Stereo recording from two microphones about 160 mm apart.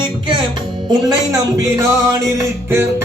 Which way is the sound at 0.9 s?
25° right (ahead or behind).